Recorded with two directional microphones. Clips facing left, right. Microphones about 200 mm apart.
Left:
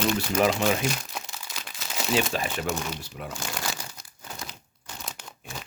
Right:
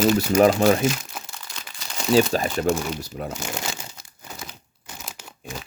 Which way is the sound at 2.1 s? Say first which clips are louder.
Right 8 dB; 40° right (ahead or behind).